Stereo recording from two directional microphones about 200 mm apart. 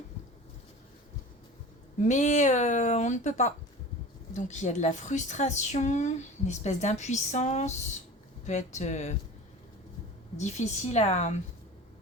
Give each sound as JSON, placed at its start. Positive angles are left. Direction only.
{"t": 2.0, "sound": "speech", "side_deg": 35}
{"t": 10.3, "sound": "speech", "side_deg": 35}